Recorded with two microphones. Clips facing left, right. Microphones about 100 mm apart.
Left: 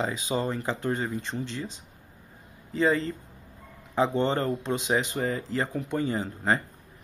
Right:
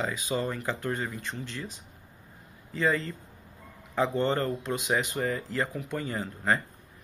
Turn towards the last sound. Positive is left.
turn(degrees=25)  # may be behind; listen again after turning